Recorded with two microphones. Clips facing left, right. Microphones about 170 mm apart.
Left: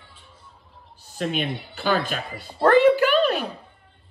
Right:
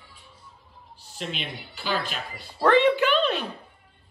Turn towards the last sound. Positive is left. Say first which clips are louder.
# left 3 dB
turn(degrees=0)  # may be behind; listen again after turning